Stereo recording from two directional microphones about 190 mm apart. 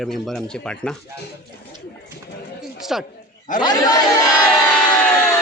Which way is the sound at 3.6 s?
20° left (ahead or behind).